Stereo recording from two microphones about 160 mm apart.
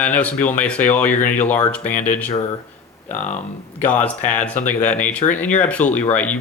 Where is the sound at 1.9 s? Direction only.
50° left (ahead or behind).